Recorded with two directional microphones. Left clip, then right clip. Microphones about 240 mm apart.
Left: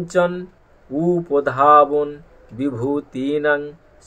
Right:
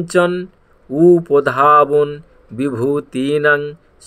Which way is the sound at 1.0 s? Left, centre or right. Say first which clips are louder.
Right 8 dB; right.